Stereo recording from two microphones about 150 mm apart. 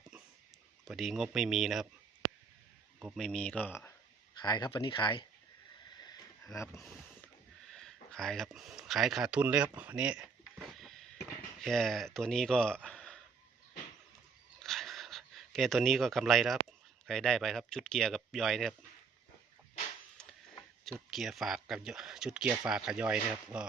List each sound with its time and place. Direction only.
0.9 s speech: centre (ahead or behind)
3.2 s speech: 5° left (ahead or behind)
4.4 s speech: 30° left (ahead or behind)
6.0 s a sound: 25° left (ahead or behind)
7.7 s a sound: 5° left (ahead or behind)
11.6 s speech: 5° left (ahead or behind)
14.6 s a sound: centre (ahead or behind)
17.1 s speech: 5° left (ahead or behind)
20.2 s printer: 5° left (ahead or behind)
21.1 s speech: centre (ahead or behind)